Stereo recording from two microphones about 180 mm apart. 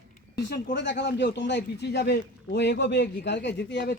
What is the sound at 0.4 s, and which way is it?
Speech, 75° left (ahead or behind).